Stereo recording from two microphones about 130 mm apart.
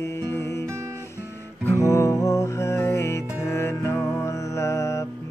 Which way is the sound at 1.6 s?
20° left (ahead or behind).